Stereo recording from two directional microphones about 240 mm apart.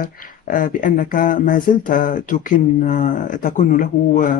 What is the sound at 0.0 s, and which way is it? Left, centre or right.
Speech, left.